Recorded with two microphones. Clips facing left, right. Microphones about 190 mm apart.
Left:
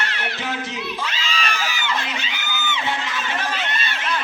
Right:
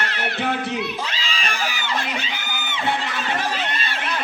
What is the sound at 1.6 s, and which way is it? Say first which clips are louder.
Music: even; 50° right (ahead or behind).